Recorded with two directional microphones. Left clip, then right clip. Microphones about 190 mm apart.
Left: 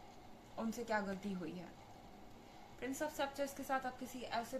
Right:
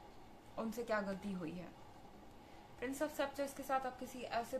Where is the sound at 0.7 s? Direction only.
25° right (ahead or behind).